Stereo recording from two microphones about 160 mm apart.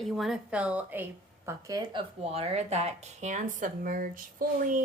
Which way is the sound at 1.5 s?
20° right (ahead or behind).